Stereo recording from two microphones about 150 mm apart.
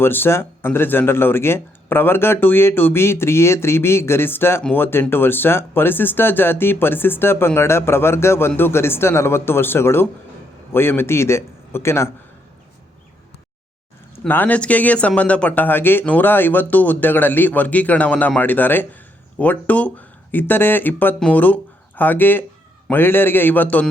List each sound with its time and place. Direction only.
0.0 s speech: 15° left (ahead or behind)
14.3 s speech: 10° left (ahead or behind)